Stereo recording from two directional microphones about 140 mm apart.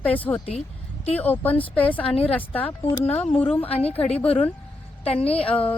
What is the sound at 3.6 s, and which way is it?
Speech, 45° left (ahead or behind).